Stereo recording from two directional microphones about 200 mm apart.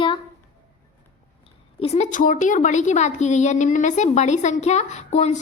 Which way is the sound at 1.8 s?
30° left (ahead or behind).